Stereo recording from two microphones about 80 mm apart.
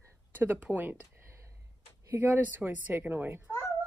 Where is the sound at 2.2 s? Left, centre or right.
Right.